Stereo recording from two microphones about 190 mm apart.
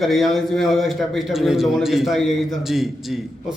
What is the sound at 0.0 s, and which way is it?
A man's voice, centre (ahead or behind).